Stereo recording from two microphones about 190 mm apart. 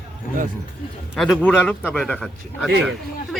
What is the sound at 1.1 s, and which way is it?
Speech, centre (ahead or behind).